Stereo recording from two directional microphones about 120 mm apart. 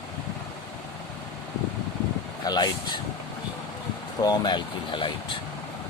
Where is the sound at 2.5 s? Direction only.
35° left (ahead or behind).